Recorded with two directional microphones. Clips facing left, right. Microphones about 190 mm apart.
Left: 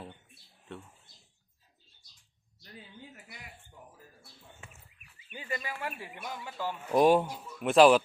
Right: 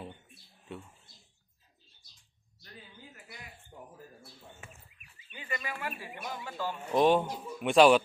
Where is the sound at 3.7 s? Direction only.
45° right (ahead or behind).